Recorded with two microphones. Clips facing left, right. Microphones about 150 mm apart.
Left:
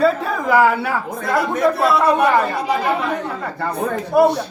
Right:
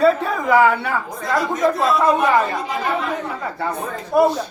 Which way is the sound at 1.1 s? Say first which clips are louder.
Left 2 dB; 60° left (ahead or behind).